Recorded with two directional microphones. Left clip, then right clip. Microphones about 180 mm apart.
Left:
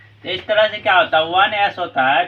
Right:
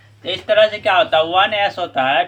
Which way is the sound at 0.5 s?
30° right (ahead or behind).